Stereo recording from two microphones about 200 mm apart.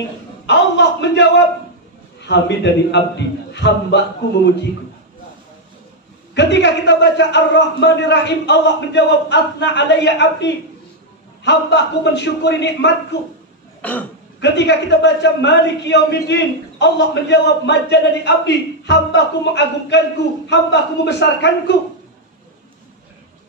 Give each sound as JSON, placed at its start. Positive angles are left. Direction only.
{"t": 0.5, "sound": "a man's voice", "side_deg": 60}
{"t": 6.3, "sound": "a man's voice", "side_deg": 60}
{"t": 13.7, "sound": "cough", "side_deg": 10}
{"t": 14.4, "sound": "a man's voice", "side_deg": 60}